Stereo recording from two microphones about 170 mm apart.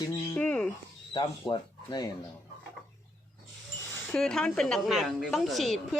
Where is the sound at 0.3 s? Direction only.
10° left (ahead or behind).